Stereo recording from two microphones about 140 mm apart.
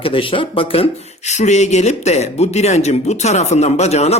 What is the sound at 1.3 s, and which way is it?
Speech, 55° left (ahead or behind).